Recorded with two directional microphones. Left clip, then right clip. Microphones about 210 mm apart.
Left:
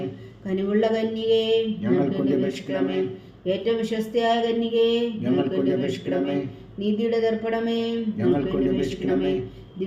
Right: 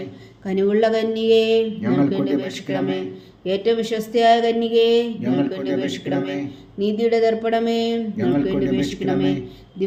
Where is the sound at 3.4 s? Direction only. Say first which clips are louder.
Right 4 dB; 35° right (ahead or behind).